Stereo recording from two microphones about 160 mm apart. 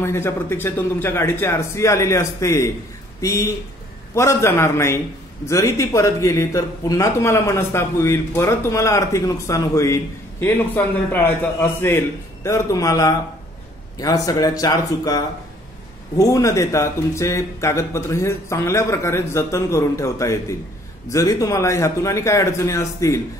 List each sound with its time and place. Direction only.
0.0 s a man's voice: 15° left (ahead or behind)